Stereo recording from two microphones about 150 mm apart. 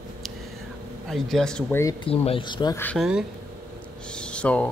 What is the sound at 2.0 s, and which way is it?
Speech, 35° left (ahead or behind).